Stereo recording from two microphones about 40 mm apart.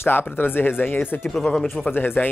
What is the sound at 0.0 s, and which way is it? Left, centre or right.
Speech, left.